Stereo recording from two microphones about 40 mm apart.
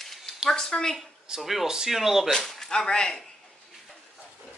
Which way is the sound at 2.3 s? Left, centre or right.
Centre.